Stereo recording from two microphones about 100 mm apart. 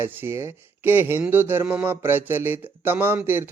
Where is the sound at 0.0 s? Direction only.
20° right (ahead or behind).